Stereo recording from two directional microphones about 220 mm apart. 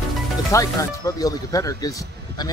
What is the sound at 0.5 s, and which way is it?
Speech, 15° left (ahead or behind).